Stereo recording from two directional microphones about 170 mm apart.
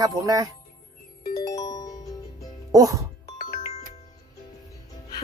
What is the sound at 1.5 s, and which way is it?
Music, 20° left (ahead or behind).